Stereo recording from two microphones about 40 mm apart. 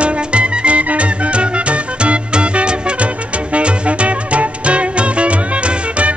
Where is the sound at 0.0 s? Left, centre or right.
Right.